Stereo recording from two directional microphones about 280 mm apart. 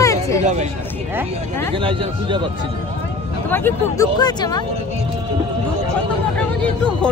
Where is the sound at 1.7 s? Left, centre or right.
Centre.